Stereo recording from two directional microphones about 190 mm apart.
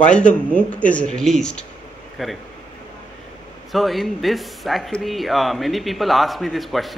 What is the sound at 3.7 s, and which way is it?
Speech, centre (ahead or behind).